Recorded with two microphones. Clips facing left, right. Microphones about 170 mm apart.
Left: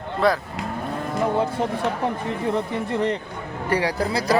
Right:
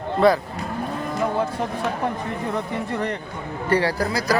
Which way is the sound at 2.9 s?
20° left (ahead or behind).